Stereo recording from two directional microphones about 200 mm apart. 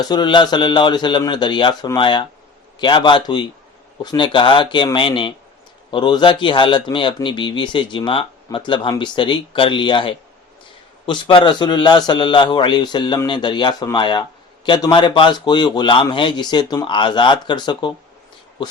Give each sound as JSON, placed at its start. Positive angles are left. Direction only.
{"t": 0.0, "sound": "a man's voice", "side_deg": 20}